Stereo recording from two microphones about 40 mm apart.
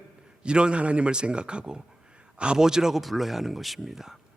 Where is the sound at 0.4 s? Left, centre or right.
Right.